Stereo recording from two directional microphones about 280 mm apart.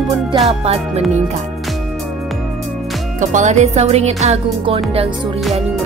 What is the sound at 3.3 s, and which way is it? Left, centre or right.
Music, right.